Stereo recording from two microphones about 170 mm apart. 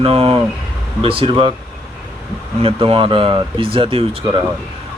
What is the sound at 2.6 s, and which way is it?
Speech, 35° right (ahead or behind).